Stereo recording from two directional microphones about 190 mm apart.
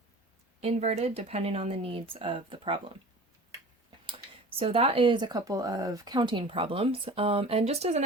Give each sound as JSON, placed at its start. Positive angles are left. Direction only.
{"t": 0.6, "sound": "speech", "side_deg": -35}
{"t": 4.5, "sound": "speech", "side_deg": -30}